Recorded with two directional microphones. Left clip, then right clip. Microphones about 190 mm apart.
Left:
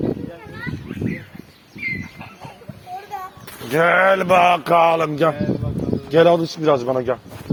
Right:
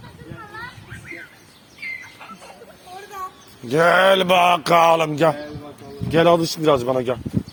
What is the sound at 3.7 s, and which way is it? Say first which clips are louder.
Mantra: even; 45° right (ahead or behind).